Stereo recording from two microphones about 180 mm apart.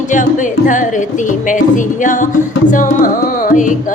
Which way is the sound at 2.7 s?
45° left (ahead or behind).